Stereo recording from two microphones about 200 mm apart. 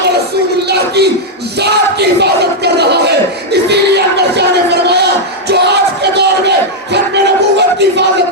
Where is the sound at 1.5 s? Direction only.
55° right (ahead or behind).